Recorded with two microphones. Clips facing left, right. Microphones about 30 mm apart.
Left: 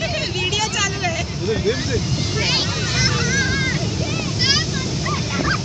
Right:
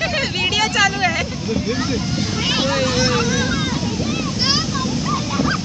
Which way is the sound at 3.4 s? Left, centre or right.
Left.